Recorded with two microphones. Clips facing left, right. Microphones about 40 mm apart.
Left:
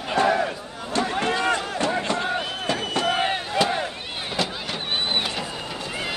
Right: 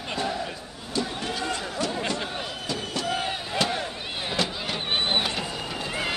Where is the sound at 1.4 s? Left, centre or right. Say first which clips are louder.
Left 6 dB; left.